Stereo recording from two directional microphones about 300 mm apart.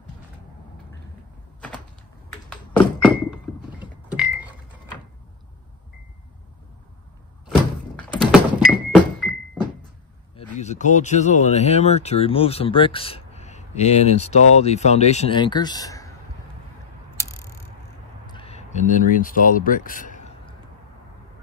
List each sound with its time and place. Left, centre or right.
2.7 s thunk: centre
8.2 s thunk: centre
10.3 s speech: left
18.2 s a sound: centre